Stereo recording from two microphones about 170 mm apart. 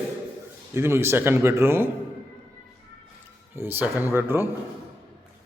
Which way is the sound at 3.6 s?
10° right (ahead or behind).